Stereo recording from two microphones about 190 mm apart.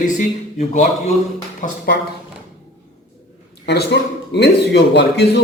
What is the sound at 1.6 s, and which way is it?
Speech, 40° left (ahead or behind).